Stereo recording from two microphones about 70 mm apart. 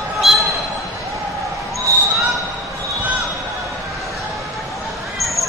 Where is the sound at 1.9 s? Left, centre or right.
Right.